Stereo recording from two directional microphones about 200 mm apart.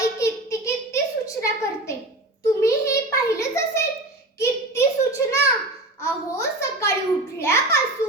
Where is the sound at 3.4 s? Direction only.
15° left (ahead or behind).